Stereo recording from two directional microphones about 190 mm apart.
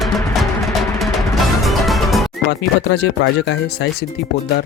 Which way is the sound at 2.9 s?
60° left (ahead or behind).